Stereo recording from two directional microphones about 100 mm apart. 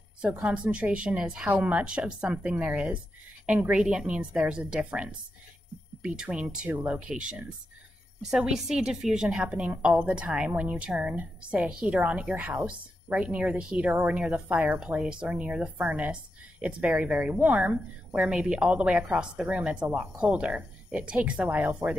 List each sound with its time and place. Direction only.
0.2 s a woman's voice: 10° right (ahead or behind)
3.8 s a woman's voice: 5° right (ahead or behind)